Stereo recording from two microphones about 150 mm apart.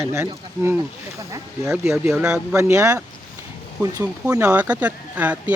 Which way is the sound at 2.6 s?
20° right (ahead or behind).